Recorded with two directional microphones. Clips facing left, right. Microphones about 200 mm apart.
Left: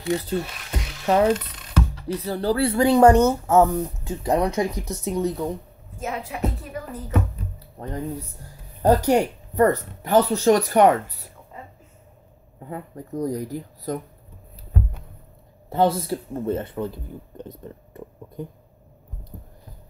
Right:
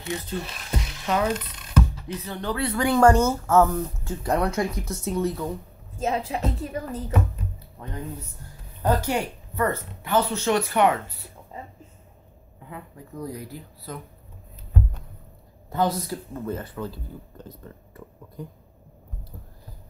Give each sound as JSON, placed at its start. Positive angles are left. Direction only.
{"t": 0.0, "sound": "speech", "side_deg": 35}
{"t": 5.9, "sound": "speech", "side_deg": -25}
{"t": 7.8, "sound": "speech", "side_deg": 40}
{"t": 11.5, "sound": "a sound", "side_deg": -25}
{"t": 12.5, "sound": "speech", "side_deg": 40}
{"t": 15.7, "sound": "speech", "side_deg": 25}